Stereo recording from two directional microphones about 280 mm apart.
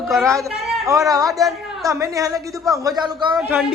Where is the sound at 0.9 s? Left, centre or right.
Centre.